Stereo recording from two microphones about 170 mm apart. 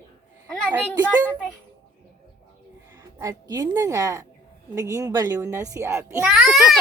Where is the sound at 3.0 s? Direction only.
20° right (ahead or behind).